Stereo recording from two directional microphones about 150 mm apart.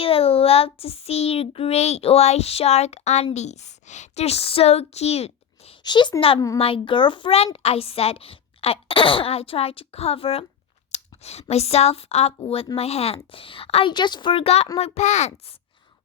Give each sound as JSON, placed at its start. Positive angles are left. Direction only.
{"t": 0.0, "sound": "child singing", "side_deg": 40}
{"t": 3.3, "sound": "speech", "side_deg": 50}
{"t": 5.8, "sound": "a woman's voice", "side_deg": 30}
{"t": 10.9, "sound": "child singing", "side_deg": 45}
{"t": 13.3, "sound": "a woman's voice", "side_deg": 35}
{"t": 14.8, "sound": "child singing", "side_deg": 45}